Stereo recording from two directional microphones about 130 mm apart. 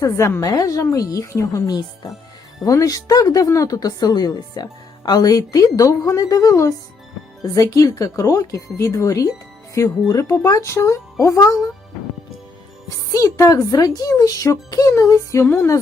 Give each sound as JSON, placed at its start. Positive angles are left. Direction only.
{"t": 0.0, "sound": "speech", "side_deg": 20}
{"t": 13.1, "sound": "speech", "side_deg": 25}